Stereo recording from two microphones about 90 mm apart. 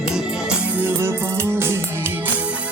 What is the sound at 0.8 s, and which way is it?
Music, 25° right (ahead or behind).